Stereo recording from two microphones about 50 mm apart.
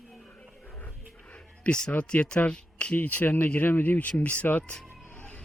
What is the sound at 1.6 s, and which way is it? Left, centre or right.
Speech, centre.